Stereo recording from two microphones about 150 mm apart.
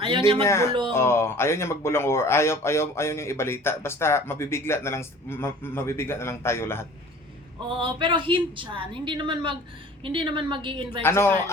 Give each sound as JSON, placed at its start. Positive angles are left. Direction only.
{"t": 0.4, "sound": "speech", "side_deg": 20}
{"t": 7.7, "sound": "a woman's voice", "side_deg": -35}
{"t": 11.0, "sound": "speech", "side_deg": 15}